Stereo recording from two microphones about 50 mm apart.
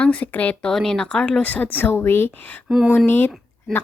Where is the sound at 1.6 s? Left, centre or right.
Left.